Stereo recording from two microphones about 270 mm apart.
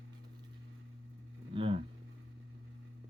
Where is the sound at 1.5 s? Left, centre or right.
Centre.